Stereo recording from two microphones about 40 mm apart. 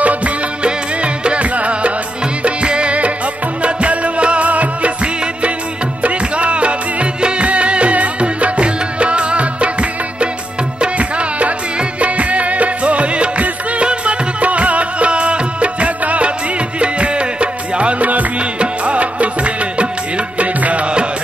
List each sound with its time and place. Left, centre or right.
0.0 s music: right
0.7 s music: right